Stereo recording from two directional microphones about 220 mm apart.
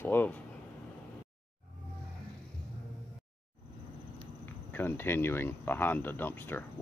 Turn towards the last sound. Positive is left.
turn(degrees=10)  # may be behind; listen again after turning